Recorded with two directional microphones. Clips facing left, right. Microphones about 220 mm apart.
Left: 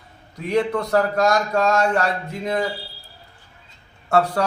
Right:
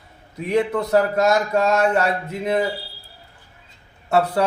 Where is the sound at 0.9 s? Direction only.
20° right (ahead or behind).